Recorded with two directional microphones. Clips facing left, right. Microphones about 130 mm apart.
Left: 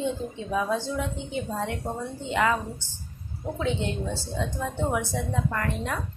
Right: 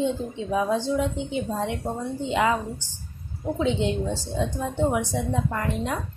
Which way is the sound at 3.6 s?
20° right (ahead or behind).